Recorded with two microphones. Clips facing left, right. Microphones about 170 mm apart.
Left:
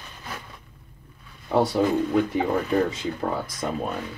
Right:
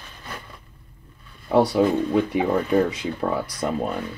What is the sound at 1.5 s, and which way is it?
Speech, 60° right (ahead or behind).